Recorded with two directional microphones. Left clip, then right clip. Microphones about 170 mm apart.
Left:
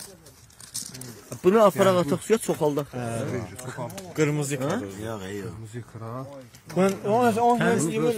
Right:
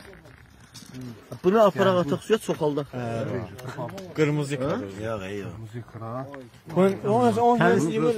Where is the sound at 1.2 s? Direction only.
50° left (ahead or behind).